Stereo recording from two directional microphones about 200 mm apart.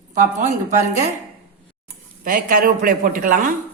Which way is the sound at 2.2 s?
45° right (ahead or behind).